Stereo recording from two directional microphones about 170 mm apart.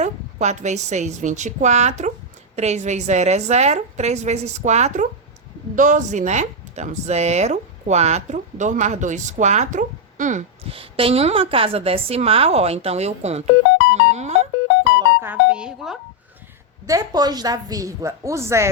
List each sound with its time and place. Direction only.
0.0 s a woman's voice: 45° right (ahead or behind)
10.6 s a woman's voice: 35° right (ahead or behind)
13.9 s music: 40° right (ahead or behind)
15.2 s doorbell: 10° right (ahead or behind)
16.8 s a woman's voice: 20° right (ahead or behind)